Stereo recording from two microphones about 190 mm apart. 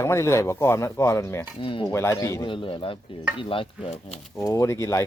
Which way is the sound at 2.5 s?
25° left (ahead or behind).